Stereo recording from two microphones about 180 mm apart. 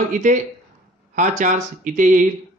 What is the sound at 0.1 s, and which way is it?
Speech, 45° right (ahead or behind).